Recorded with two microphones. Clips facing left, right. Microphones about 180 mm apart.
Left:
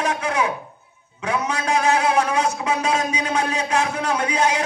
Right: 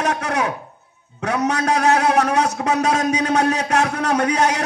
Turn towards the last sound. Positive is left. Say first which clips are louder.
# right 3 dB
turn(degrees=-70)  # may be behind; listen again after turning